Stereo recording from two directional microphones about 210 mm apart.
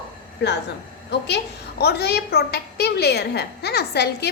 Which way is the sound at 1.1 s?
50° left (ahead or behind).